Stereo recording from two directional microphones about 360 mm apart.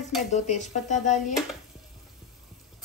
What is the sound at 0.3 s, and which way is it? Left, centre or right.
Speech, centre.